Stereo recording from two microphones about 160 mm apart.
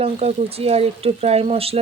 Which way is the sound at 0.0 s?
40° right (ahead or behind).